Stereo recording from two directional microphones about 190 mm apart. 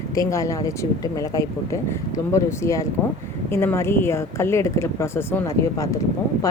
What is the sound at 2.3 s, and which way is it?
Speech, 15° left (ahead or behind).